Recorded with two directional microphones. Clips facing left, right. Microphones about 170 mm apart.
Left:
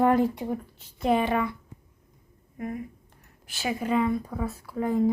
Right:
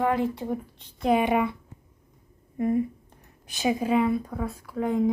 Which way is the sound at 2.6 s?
30° right (ahead or behind).